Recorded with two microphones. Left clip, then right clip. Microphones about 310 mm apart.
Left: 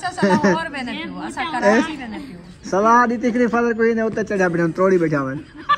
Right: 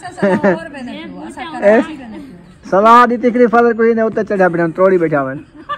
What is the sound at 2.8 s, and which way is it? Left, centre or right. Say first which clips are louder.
Speech: right 7 dB; right.